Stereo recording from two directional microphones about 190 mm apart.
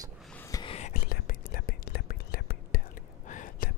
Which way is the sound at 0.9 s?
50° left (ahead or behind).